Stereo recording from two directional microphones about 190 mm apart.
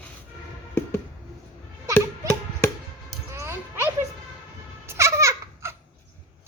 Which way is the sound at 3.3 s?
15° right (ahead or behind).